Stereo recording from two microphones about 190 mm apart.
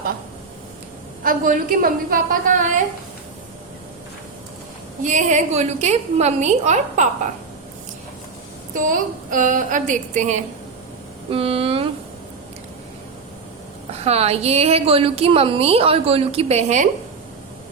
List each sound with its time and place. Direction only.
1.2 s a woman's voice: 45° right (ahead or behind)
5.0 s a woman's voice: 40° right (ahead or behind)
8.7 s a woman's voice: 45° right (ahead or behind)
14.0 s a woman's voice: 35° right (ahead or behind)